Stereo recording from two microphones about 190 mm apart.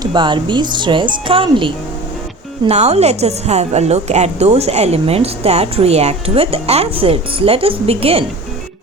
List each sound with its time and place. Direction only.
0.0 s a woman's voice: 25° right (ahead or behind)